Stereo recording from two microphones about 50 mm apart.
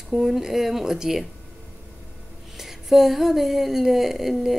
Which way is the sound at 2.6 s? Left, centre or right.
Centre.